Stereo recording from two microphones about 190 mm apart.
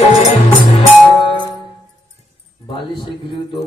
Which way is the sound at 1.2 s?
25° left (ahead or behind).